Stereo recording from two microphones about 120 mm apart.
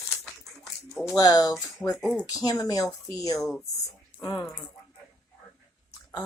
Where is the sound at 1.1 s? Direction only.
30° left (ahead or behind).